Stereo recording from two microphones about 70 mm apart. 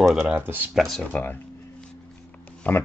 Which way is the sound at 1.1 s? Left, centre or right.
Left.